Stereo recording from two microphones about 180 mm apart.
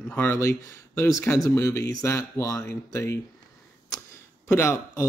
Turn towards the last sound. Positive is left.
turn(degrees=15)  # may be behind; listen again after turning